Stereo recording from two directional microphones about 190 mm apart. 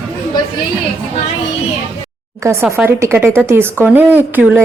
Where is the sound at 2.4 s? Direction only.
15° right (ahead or behind).